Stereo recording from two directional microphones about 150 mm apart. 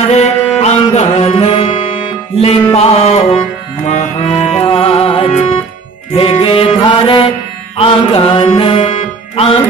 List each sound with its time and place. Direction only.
0.1 s music: 45° left (ahead or behind)